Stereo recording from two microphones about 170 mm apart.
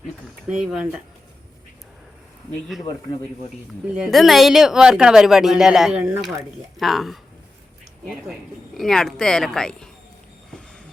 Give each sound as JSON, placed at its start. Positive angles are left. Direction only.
{"t": 0.4, "sound": "speech", "side_deg": -5}
{"t": 2.5, "sound": "speech", "side_deg": 0}
{"t": 3.8, "sound": "speech", "side_deg": -5}
{"t": 8.3, "sound": "speech", "side_deg": 0}